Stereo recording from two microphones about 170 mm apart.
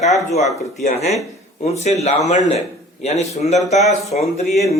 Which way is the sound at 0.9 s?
40° left (ahead or behind).